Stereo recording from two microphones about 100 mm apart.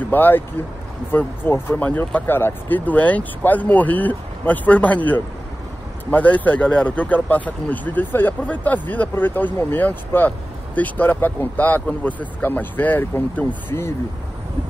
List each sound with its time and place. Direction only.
0.0 s speech: 20° left (ahead or behind)